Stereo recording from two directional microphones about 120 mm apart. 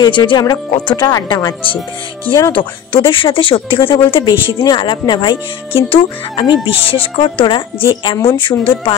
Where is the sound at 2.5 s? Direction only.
45° left (ahead or behind).